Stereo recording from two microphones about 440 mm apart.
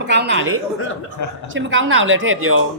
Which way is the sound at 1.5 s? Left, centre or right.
Right.